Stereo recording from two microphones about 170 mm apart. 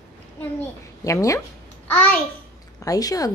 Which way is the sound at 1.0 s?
20° left (ahead or behind).